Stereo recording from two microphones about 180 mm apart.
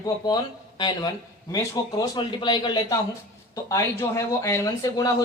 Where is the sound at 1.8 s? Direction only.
20° left (ahead or behind).